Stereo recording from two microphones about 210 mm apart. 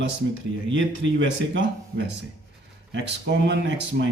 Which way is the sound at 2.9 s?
55° right (ahead or behind).